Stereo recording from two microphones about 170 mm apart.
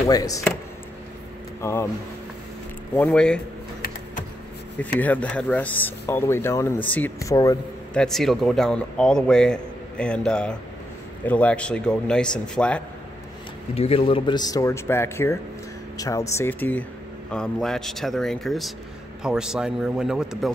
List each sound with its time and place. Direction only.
0.0 s a man's voice: 20° left (ahead or behind)
1.6 s speech: 15° left (ahead or behind)
3.1 s speech: 5° left (ahead or behind)
4.8 s speech: 10° left (ahead or behind)
7.9 s speech: 5° left (ahead or behind)
13.7 s a man's voice: 35° left (ahead or behind); by 20.5 s centre (ahead or behind)